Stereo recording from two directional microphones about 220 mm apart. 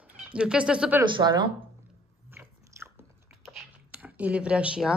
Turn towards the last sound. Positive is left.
turn(degrees=-5)  # may be behind; listen again after turning